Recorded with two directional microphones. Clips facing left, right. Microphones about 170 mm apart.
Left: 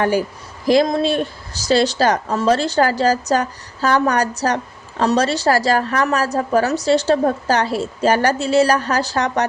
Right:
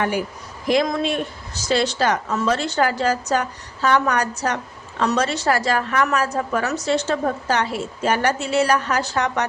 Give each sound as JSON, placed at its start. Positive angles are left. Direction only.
{"t": 0.0, "sound": "speech", "side_deg": 35}